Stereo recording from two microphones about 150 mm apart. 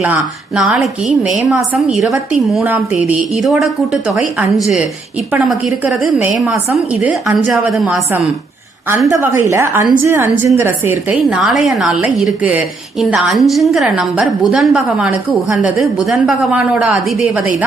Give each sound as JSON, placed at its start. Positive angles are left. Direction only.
{"t": 0.0, "sound": "a woman's voice", "side_deg": -10}
{"t": 2.6, "sound": "a woman's voice", "side_deg": -10}
{"t": 9.0, "sound": "a woman's voice", "side_deg": -20}